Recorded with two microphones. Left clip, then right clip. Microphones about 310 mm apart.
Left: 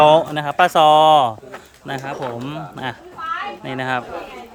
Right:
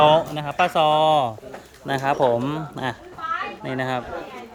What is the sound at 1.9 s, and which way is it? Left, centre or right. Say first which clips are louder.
Speech: right 6 dB; centre.